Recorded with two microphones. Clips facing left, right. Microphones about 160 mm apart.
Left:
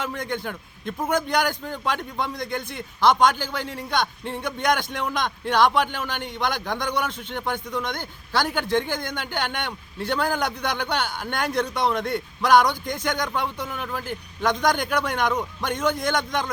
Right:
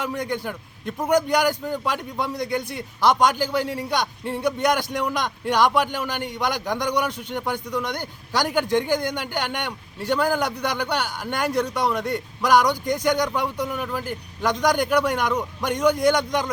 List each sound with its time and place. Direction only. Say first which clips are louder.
0.0 s a man's voice: right 2 dB; 10° right (ahead or behind)